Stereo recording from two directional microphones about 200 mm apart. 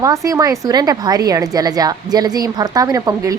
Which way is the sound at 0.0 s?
15° right (ahead or behind).